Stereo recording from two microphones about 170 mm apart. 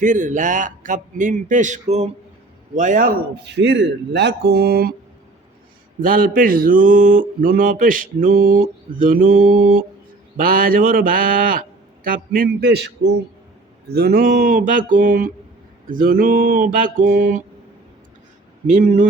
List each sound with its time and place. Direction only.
0.0 s a man's voice: 50° right (ahead or behind)
6.0 s speech: 55° right (ahead or behind); by 13.1 s 90° right
13.8 s a man's voice: 70° right (ahead or behind); by 17.4 s 50° right (ahead or behind)
18.7 s a man's voice: 50° right (ahead or behind)